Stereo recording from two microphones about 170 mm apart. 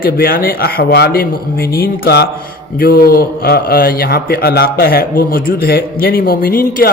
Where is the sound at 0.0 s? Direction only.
60° left (ahead or behind).